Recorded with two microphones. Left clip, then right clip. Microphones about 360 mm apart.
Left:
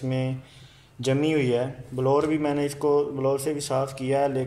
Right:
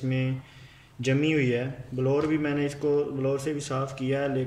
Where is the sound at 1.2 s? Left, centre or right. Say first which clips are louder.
Left 2 dB; centre.